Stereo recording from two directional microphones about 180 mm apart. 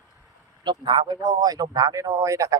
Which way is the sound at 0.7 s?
25° right (ahead or behind).